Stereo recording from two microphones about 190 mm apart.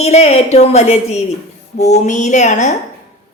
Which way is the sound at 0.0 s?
35° left (ahead or behind).